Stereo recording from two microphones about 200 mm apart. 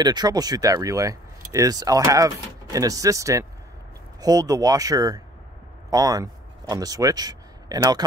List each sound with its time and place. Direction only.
0.0 s speech: 20° right (ahead or behind)